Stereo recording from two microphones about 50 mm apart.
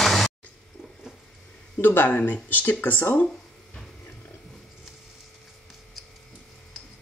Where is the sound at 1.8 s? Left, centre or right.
Left.